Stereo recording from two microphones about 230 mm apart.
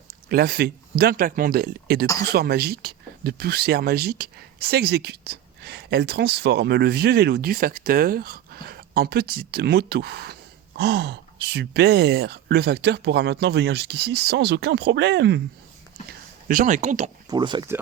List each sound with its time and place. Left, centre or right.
0.3 s speech: right
16.5 s speech: right
17.2 s speech: centre